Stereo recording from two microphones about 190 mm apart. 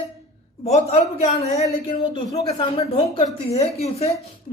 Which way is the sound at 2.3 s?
30° left (ahead or behind).